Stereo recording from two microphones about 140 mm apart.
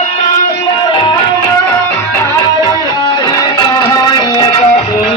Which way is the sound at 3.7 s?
35° left (ahead or behind).